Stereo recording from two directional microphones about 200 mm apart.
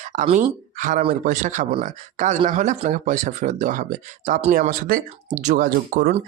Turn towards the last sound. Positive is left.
turn(degrees=-45)  # may be behind; listen again after turning